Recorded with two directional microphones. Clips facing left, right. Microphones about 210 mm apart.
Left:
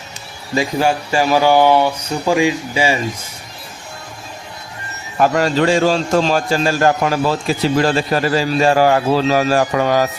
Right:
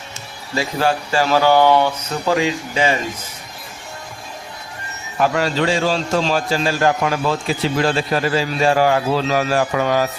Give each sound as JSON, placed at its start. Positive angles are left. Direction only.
{"t": 0.5, "sound": "speech", "side_deg": 15}
{"t": 5.2, "sound": "a man's voice", "side_deg": 45}